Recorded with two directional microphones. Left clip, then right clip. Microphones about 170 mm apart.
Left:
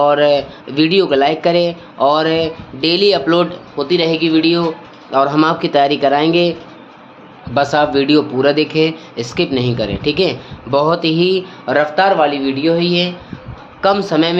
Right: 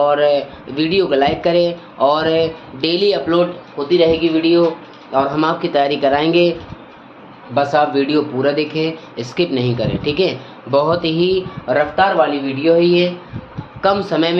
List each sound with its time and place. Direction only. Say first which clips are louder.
0.0 s speech: left 2 dB; 35° left (ahead or behind); by 4.6 s 80° left
5.1 s speech: left 3 dB; 50° left (ahead or behind); by 6.6 s 25° left (ahead or behind)
7.5 s speech: left 1 dB; 55° left (ahead or behind); by 11.4 s 35° left (ahead or behind)
11.6 s a man's voice: left 1 dB; 60° left (ahead or behind)
12.6 s speech: right 3 dB; 70° left (ahead or behind)
13.8 s speech: left 2 dB; 35° left (ahead or behind)